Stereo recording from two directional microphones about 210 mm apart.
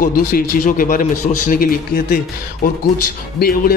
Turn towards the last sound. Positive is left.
turn(degrees=45)  # may be behind; listen again after turning